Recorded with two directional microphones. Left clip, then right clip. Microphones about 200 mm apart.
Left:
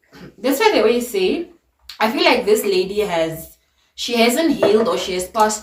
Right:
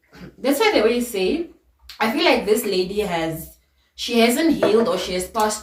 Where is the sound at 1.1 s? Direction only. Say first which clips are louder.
Left 3 dB; 15° left (ahead or behind).